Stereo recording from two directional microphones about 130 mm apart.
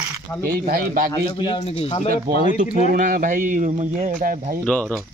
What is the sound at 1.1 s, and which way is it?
Speech, 35° left (ahead or behind).